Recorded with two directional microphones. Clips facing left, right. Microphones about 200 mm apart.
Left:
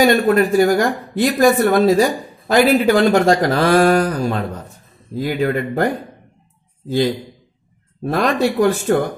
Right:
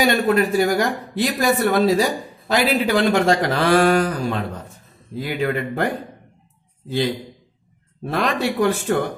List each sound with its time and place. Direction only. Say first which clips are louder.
0.0 s speech: left 4 dB; 45° left (ahead or behind)
8.0 s speech: left 5 dB; 45° left (ahead or behind)